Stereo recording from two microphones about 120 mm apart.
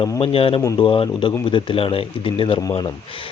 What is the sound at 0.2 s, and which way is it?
Speech, 50° left (ahead or behind).